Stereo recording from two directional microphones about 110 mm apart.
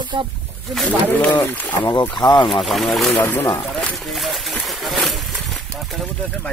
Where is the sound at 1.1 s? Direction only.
15° left (ahead or behind).